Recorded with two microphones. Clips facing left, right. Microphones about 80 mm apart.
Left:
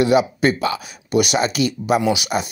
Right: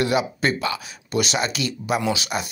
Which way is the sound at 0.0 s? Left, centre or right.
Left.